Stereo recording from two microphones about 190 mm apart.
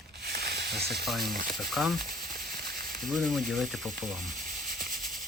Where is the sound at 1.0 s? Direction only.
Centre (ahead or behind).